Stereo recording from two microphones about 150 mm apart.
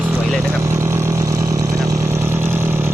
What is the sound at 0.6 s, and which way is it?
Vehicle, 20° right (ahead or behind).